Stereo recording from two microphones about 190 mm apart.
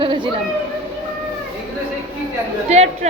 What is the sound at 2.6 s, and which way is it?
Speech, 35° right (ahead or behind).